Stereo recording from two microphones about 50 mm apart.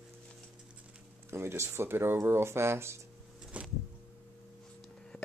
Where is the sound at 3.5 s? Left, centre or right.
Right.